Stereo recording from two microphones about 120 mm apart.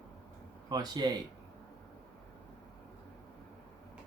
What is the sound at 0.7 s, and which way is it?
Speech, 35° right (ahead or behind).